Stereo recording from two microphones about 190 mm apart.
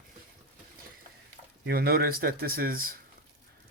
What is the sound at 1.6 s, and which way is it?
Speech, 55° right (ahead or behind).